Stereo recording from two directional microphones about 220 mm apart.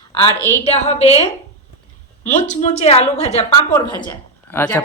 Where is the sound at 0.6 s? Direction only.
30° left (ahead or behind).